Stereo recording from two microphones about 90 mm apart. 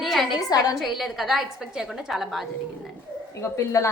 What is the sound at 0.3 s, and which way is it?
Speech, 45° left (ahead or behind).